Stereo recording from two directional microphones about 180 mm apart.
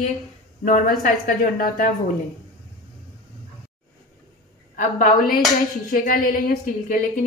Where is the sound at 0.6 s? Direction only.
45° left (ahead or behind).